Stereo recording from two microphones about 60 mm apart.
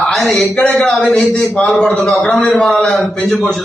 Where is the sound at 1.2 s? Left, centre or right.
Left.